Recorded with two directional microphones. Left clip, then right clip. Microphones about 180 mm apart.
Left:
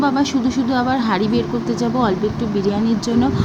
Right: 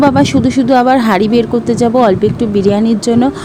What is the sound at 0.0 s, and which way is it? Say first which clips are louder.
Speech: right 8 dB; 45° right (ahead or behind).